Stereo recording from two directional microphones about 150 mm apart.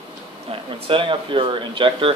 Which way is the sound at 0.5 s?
35° right (ahead or behind).